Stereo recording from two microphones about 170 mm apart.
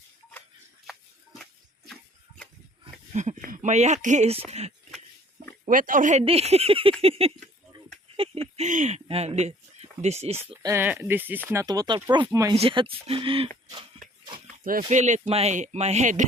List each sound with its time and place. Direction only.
2.8 s speech: 40° right (ahead or behind)
5.6 s speech: 50° right (ahead or behind); by 7.3 s 35° right (ahead or behind)
8.2 s a sound: 35° right (ahead or behind)
8.5 s speech: 45° right (ahead or behind)
10.6 s speech: 15° right (ahead or behind); by 13.5 s 30° right (ahead or behind)
14.6 s speech: 50° right (ahead or behind)